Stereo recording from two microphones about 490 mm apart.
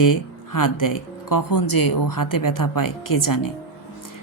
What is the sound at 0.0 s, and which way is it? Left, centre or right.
Speech, left.